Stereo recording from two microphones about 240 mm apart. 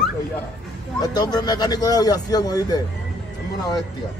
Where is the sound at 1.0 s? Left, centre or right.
Centre.